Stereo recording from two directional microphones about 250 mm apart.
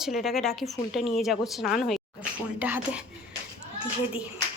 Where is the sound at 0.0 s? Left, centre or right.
Centre.